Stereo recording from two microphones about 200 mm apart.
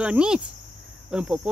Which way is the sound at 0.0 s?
5° right (ahead or behind).